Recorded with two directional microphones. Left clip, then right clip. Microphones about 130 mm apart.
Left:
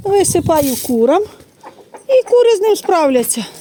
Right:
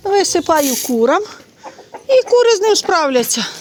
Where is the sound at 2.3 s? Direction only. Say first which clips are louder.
Left 1 dB; 45° left (ahead or behind).